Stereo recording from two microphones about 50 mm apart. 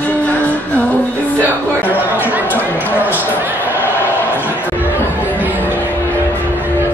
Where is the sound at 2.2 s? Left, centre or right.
Right.